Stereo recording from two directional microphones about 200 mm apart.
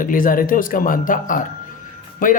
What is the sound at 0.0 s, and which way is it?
Speech, 45° left (ahead or behind).